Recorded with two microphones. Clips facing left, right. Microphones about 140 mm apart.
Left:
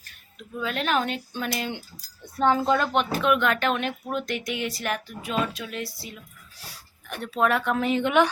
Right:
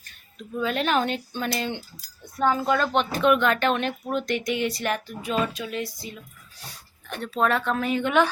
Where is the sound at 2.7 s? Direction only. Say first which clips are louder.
Even; 10° left (ahead or behind).